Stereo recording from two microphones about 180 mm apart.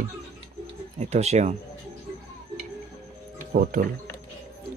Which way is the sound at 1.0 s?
40° right (ahead or behind).